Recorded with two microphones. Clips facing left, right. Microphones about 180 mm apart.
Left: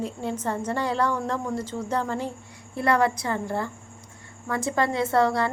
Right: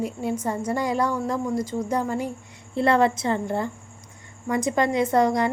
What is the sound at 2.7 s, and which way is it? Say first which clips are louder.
A woman's voice: right 3 dB; 25° right (ahead or behind).